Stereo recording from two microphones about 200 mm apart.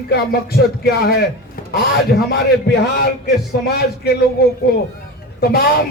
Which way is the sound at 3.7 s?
50° left (ahead or behind).